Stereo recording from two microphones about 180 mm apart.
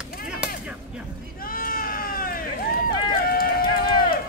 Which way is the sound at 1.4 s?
50° left (ahead or behind).